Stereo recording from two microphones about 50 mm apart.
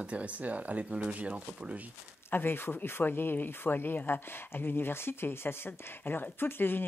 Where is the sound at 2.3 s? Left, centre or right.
Left.